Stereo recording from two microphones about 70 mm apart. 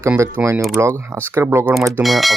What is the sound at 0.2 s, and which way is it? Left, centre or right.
Speech, right.